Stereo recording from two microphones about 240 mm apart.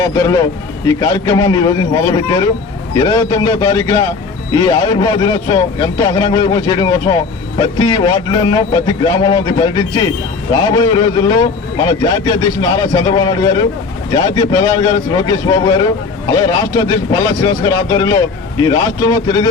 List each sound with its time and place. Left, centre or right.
0.0 s speech: centre